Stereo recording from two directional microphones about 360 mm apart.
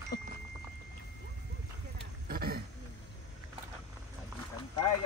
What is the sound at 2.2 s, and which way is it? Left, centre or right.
Speech, right.